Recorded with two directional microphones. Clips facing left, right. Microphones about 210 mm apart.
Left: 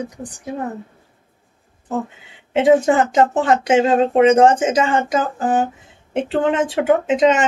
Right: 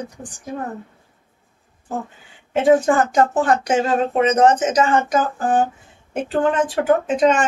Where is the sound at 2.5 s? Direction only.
20° left (ahead or behind).